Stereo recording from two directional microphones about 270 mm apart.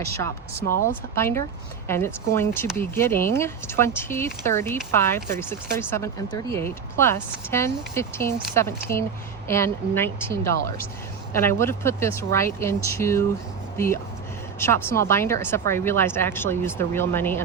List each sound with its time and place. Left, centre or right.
0.1 s a woman's voice: centre